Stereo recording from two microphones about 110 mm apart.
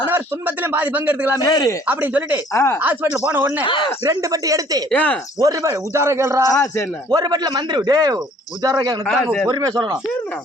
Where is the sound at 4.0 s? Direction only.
30° right (ahead or behind).